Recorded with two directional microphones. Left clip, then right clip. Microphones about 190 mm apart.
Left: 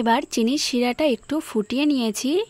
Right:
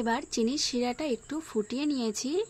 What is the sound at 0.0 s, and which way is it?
A woman's voice, 50° left (ahead or behind).